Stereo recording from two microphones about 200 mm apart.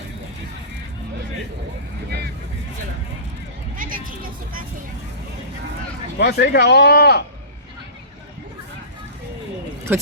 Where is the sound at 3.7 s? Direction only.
45° right (ahead or behind).